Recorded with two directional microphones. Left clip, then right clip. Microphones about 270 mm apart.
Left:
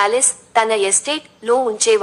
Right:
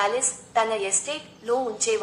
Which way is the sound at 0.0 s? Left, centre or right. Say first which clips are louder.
Left 8 dB; left.